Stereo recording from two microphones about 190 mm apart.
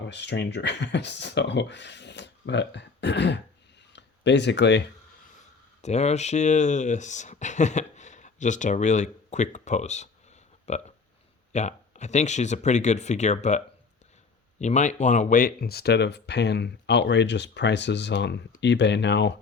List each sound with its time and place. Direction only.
0.0 s speech: 65° left (ahead or behind)
5.8 s speech: 35° left (ahead or behind)
14.6 s speech: 40° left (ahead or behind); by 19.4 s 65° left (ahead or behind)